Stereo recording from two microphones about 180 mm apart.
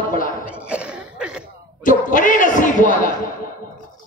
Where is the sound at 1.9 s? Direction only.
45° left (ahead or behind).